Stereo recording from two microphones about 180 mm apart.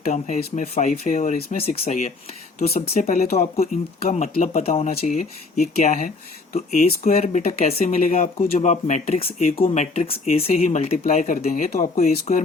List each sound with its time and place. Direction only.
0.0 s speech: 40° left (ahead or behind)